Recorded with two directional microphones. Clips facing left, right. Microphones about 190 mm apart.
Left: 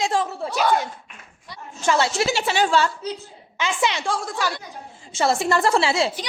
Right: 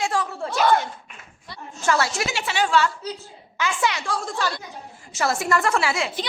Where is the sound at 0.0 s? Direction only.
20° left (ahead or behind).